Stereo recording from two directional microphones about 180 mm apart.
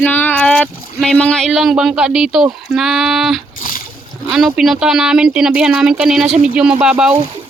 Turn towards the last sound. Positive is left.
turn(degrees=-5)  # may be behind; listen again after turning